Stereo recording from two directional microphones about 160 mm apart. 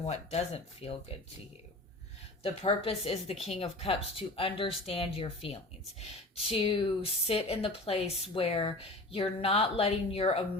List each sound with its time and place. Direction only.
0.0 s speech: 40° left (ahead or behind)
2.4 s speech: 35° left (ahead or behind)